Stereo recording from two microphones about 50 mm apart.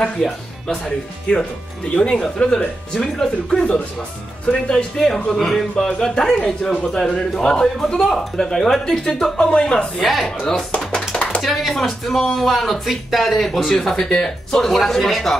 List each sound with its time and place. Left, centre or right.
0.0 s a man's voice: centre
4.9 s a man's voice: centre
9.5 s speech: left
10.0 s speech: centre
11.0 s a sound: centre
11.4 s speech: centre